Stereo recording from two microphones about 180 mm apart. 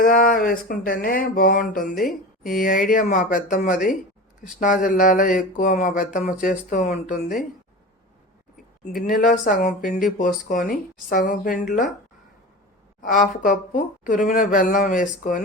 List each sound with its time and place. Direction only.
0.0 s speech: 50° left (ahead or behind)
9.0 s speech: 45° left (ahead or behind)
13.0 s speech: 50° left (ahead or behind)